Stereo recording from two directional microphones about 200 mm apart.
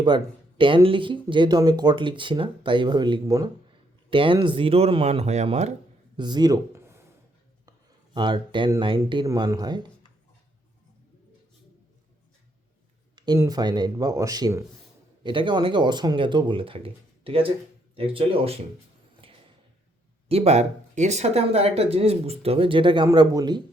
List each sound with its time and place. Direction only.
0.6 s speech: 25° right (ahead or behind)
6.1 s a sound: 20° right (ahead or behind)
8.1 s speech: 25° right (ahead or behind)
13.1 s speech: 20° right (ahead or behind)
19.2 s a sound: 25° right (ahead or behind)
20.2 s speech: 30° right (ahead or behind)